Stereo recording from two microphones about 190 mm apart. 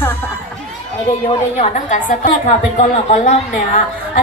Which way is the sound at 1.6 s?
40° left (ahead or behind).